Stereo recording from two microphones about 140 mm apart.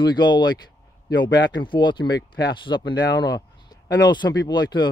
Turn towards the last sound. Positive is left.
turn(degrees=30)  # may be behind; listen again after turning